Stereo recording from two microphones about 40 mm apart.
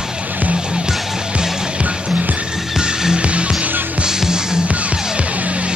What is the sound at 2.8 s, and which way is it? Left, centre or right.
Music, right.